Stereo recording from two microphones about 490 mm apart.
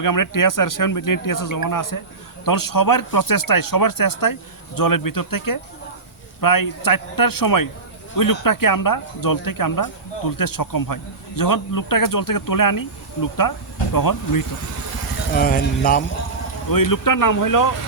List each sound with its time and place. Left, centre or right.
0.0 s speech: left
13.9 s speech: left
15.4 s speech: centre
16.6 s speech: left